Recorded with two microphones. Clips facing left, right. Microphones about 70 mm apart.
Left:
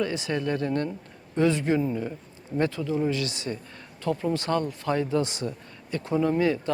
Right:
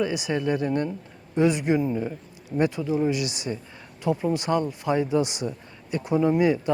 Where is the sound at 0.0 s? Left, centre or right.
Centre.